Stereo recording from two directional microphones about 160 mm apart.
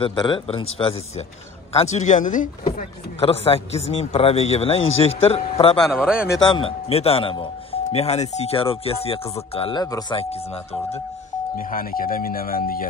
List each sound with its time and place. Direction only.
0.0 s a man's voice: 30° left (ahead or behind); by 2.5 s 55° left (ahead or behind)
3.2 s speech: 35° left (ahead or behind)
5.8 s speech: 5° right (ahead or behind)
6.3 s speech: 30° left (ahead or behind)
11.5 s speech: 60° left (ahead or behind)